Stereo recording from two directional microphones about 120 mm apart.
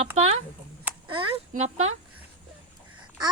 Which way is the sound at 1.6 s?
70° right (ahead or behind).